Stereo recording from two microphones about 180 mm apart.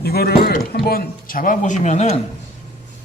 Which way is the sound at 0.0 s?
60° left (ahead or behind).